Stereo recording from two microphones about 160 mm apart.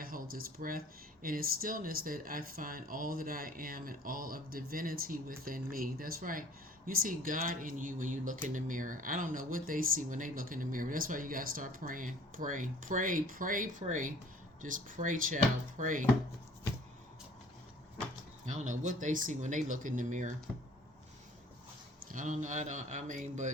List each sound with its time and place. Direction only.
0.0 s a sound: 65° right (ahead or behind)
1.2 s speech: 65° right (ahead or behind)
18.4 s speech: 50° right (ahead or behind)
22.1 s speech: 50° right (ahead or behind)